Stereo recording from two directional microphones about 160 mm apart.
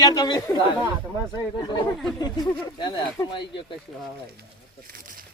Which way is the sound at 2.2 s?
25° left (ahead or behind).